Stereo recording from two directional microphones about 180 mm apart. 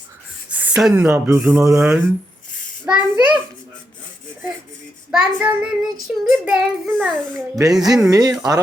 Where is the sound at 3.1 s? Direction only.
5° right (ahead or behind).